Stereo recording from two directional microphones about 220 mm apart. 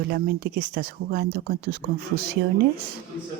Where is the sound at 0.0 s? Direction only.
45° right (ahead or behind).